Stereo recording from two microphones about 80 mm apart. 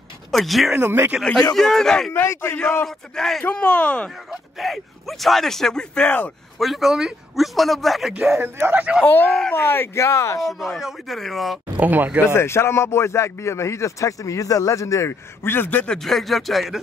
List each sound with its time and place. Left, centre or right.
0.3 s speech: centre
0.7 s speech: right
1.5 s speech: centre
2.1 s speech: left
2.6 s speech: centre
4.3 s speech: centre
6.6 s speech: centre
8.4 s speech: right
9.0 s a man's voice: left
10.4 s speech: centre
11.7 s speech: right
12.2 s a man's voice: left
15.8 s speech: centre